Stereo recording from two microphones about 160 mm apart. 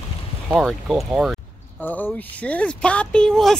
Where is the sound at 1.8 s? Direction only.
10° left (ahead or behind).